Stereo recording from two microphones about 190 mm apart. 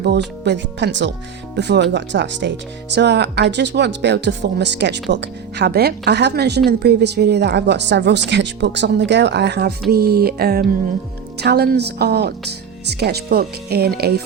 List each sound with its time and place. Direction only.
0.4 s speech: 65° right (ahead or behind)